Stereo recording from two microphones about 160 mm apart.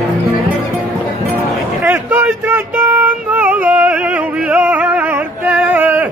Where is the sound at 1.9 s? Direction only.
10° right (ahead or behind).